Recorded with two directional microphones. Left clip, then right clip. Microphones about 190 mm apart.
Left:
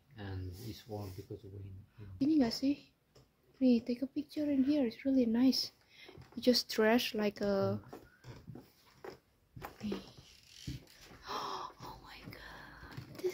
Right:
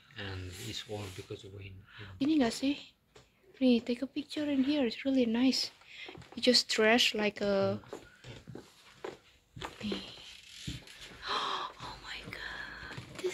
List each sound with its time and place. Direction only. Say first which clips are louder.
0.1 s a sound: right 6 dB; 25° left (ahead or behind)
1.3 s speech: right 4 dB; 25° left (ahead or behind)
2.1 s speech: right 2 dB; 10° left (ahead or behind)
9.9 s speech: right 3 dB; 15° left (ahead or behind)
11.2 s gasp: right 6 dB; 10° left (ahead or behind)
11.9 s whispering: right 8 dB; 10° left (ahead or behind)